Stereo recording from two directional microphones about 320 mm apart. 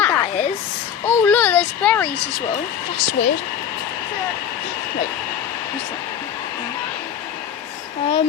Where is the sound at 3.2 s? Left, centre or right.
Centre.